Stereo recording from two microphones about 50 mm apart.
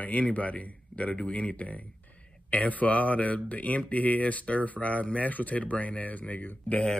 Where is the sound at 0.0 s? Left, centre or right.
Left.